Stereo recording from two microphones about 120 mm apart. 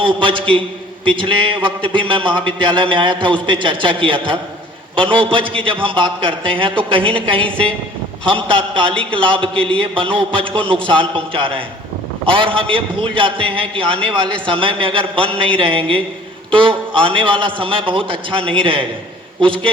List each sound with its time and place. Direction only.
0.0 s a man's voice: 45° right (ahead or behind)
8.3 s a man's voice: 45° right (ahead or behind)